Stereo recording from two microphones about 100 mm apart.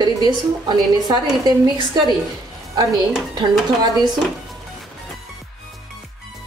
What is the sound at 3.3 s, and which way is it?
Speech, 45° right (ahead or behind).